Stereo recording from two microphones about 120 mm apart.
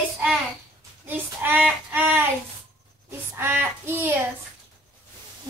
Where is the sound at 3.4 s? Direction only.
20° right (ahead or behind).